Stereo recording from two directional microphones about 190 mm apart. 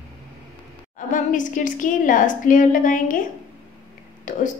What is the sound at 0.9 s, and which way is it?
A woman's voice, 45° left (ahead or behind).